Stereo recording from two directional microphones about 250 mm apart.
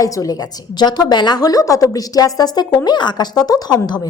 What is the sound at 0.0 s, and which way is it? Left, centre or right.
A woman's voice, centre.